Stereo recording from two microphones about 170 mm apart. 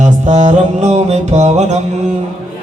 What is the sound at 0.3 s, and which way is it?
Music, 45° right (ahead or behind).